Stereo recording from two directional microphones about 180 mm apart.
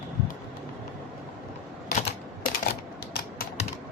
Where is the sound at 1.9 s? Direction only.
50° left (ahead or behind).